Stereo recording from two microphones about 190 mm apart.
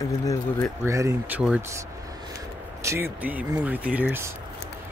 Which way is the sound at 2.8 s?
15° right (ahead or behind).